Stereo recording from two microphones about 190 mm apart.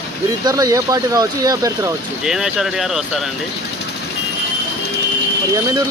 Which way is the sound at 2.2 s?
5° right (ahead or behind).